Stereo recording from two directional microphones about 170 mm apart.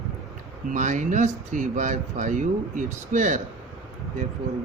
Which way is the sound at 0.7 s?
50° right (ahead or behind).